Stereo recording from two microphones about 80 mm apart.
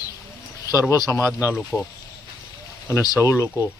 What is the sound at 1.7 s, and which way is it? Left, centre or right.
Speech, centre.